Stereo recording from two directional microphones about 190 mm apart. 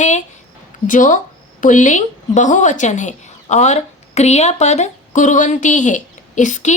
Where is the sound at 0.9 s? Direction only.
40° left (ahead or behind).